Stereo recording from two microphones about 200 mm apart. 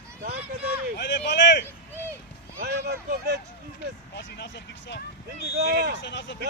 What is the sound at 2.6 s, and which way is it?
Speech, 55° right (ahead or behind).